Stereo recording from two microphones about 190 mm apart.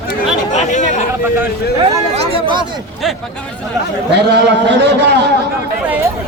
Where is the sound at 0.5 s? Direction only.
40° left (ahead or behind).